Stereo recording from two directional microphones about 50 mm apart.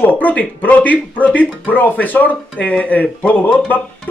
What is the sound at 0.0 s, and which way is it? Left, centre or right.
Speech, left.